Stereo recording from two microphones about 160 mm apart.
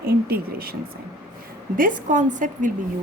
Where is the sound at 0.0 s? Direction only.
70° right (ahead or behind).